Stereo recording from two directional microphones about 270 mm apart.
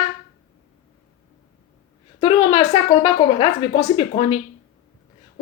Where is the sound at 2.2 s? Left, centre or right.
Centre.